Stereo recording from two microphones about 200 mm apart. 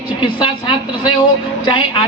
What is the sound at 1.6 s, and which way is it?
Speech, 25° left (ahead or behind).